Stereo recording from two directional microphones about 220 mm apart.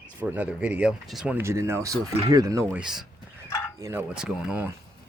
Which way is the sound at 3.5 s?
15° left (ahead or behind).